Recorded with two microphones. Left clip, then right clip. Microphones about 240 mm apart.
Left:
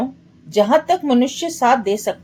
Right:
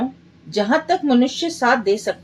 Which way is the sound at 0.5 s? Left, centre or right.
Left.